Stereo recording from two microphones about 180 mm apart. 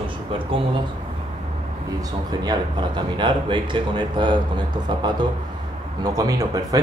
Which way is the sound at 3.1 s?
25° right (ahead or behind).